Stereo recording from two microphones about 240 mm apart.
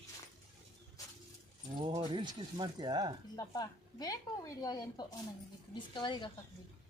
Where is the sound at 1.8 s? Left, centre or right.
Centre.